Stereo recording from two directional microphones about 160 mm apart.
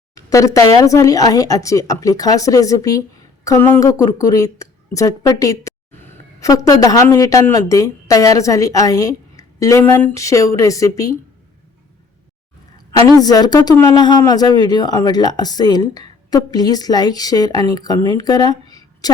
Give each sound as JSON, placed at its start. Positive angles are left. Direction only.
{"t": 0.1, "sound": "a woman's voice", "side_deg": 20}
{"t": 12.7, "sound": "a woman's voice", "side_deg": 25}